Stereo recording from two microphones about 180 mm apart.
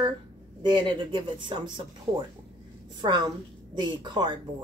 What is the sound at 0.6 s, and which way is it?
Speech, 25° right (ahead or behind).